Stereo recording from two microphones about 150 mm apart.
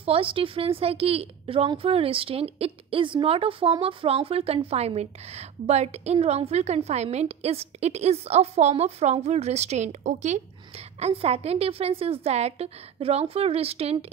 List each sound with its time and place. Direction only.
0.0 s a woman's voice: 40° right (ahead or behind)